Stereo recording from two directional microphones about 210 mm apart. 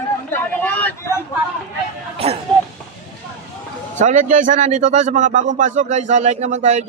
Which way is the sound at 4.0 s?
35° right (ahead or behind).